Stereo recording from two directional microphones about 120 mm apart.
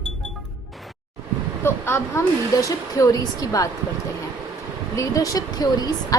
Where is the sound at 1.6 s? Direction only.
20° left (ahead or behind).